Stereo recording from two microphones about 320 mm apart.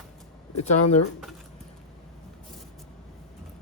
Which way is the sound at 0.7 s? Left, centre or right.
Left.